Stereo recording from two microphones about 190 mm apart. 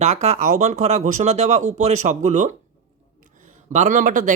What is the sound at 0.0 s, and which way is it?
Speech, 35° right (ahead or behind).